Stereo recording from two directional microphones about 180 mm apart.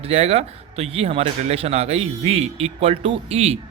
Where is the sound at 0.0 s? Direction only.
35° right (ahead or behind).